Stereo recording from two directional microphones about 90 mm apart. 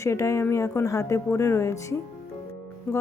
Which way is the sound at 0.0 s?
35° left (ahead or behind).